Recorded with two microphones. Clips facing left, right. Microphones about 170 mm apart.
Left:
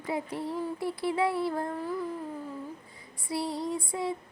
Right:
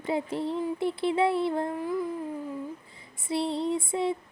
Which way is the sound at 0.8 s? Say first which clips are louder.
Right 3 dB; 25° right (ahead or behind).